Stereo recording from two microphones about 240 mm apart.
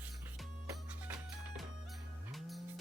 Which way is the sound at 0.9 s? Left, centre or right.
Centre.